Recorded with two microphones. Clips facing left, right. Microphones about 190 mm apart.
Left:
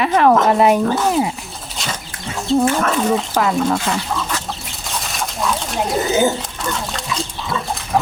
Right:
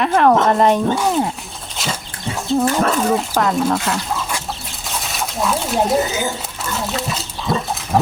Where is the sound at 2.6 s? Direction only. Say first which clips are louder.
Even; 40° right (ahead or behind).